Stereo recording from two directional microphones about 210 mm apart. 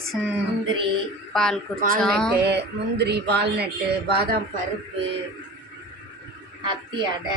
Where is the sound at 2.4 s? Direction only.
50° right (ahead or behind).